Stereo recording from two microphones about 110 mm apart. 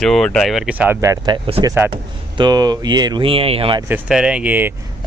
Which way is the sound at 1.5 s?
55° right (ahead or behind).